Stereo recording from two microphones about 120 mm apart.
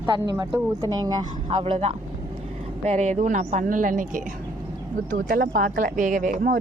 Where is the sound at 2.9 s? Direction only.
75° right (ahead or behind); by 4.2 s 90° right.